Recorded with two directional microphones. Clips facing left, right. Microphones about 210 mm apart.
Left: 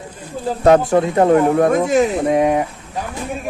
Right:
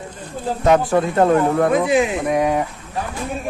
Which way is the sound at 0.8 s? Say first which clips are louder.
Left 2 dB; 20° left (ahead or behind).